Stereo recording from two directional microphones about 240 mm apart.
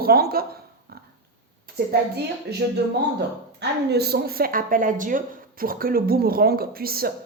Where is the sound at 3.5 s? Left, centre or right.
Right.